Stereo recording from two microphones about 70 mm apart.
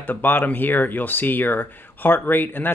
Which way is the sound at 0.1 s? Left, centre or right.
Left.